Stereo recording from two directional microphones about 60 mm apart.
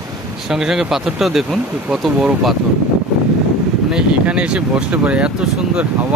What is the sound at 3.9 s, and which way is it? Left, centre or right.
Speech, centre.